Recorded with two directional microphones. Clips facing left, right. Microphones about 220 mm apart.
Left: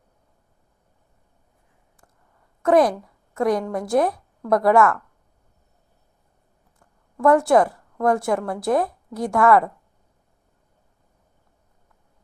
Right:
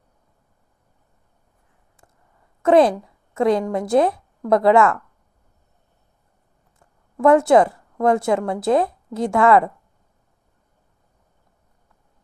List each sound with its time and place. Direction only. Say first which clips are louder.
2.6 s a woman's voice: right 3 dB; 25° right (ahead or behind)
7.2 s a woman's voice: right 2 dB; 20° right (ahead or behind)